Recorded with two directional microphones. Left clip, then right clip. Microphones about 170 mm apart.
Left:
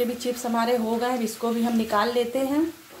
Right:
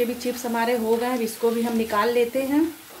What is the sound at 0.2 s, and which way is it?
Speech, centre (ahead or behind).